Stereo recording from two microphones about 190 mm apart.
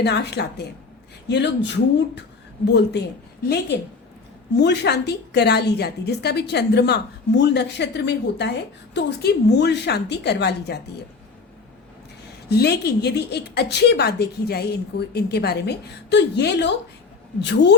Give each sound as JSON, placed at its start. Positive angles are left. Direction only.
{"t": 0.0, "sound": "a woman's voice", "side_deg": 60}
{"t": 4.5, "sound": "a woman's voice", "side_deg": 65}
{"t": 12.5, "sound": "a woman's voice", "side_deg": 55}